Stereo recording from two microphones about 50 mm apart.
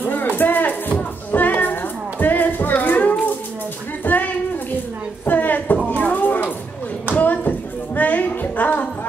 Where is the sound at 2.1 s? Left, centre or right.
Left.